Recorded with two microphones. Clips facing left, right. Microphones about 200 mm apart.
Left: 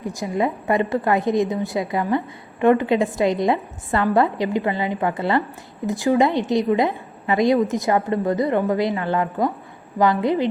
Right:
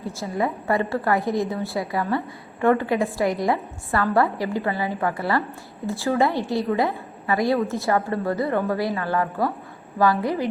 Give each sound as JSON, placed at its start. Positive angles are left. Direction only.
{"t": 0.0, "sound": "a woman's voice", "side_deg": 15}